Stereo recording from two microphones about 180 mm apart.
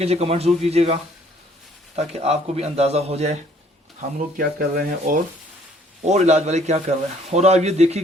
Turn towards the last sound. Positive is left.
turn(degrees=-35)  # may be behind; listen again after turning